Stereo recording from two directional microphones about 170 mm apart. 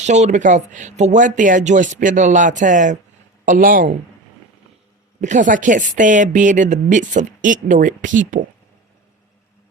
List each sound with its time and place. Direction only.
0.0 s speech: 40° right (ahead or behind)
5.2 s speech: 45° right (ahead or behind)